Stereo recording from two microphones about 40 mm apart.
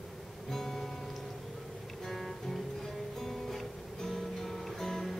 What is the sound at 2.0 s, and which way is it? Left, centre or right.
Music, centre.